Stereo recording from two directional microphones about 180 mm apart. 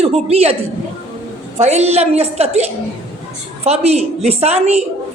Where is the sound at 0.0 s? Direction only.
35° right (ahead or behind).